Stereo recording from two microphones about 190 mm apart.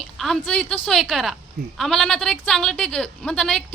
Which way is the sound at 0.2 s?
5° left (ahead or behind).